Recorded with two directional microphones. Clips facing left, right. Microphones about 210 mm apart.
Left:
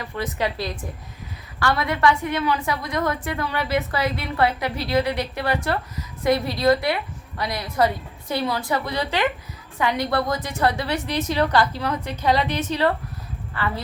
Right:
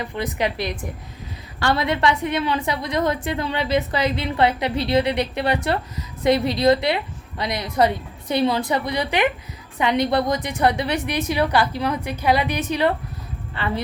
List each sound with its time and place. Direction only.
0.0 s a woman's voice: 20° right (ahead or behind)